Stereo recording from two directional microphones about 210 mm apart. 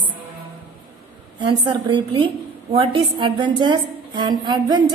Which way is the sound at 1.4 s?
25° right (ahead or behind).